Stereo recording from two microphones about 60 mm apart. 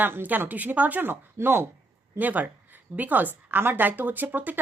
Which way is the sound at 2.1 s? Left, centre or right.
Right.